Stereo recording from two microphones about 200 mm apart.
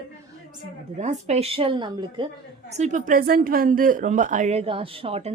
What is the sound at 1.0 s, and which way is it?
A woman's voice, 35° right (ahead or behind).